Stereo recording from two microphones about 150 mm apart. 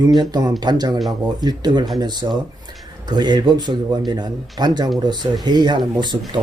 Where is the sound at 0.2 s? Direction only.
25° right (ahead or behind).